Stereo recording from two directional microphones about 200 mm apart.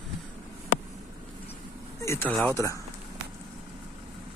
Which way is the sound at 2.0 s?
15° left (ahead or behind).